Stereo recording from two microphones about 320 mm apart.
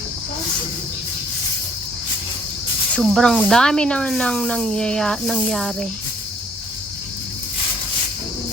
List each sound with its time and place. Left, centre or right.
2.9 s speech: centre